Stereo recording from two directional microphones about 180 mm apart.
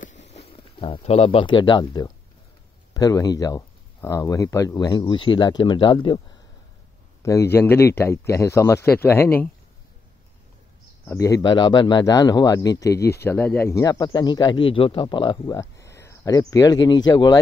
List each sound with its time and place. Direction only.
0.0 s speech: 40° left (ahead or behind); by 6.2 s 25° left (ahead or behind)
7.2 s a man's voice: 15° left (ahead or behind)
11.1 s speech: 20° left (ahead or behind)